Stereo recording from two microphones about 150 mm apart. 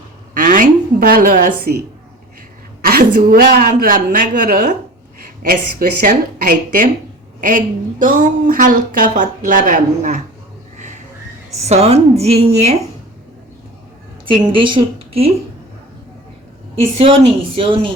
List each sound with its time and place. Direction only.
0.3 s a sound: 65° right (ahead or behind)
2.8 s a woman's voice: 75° right (ahead or behind)
8.0 s speech: 65° right (ahead or behind)
11.5 s a woman's voice: 45° right (ahead or behind)
14.3 s a woman's voice: 35° right (ahead or behind)
16.7 s a woman's voice: 40° right (ahead or behind)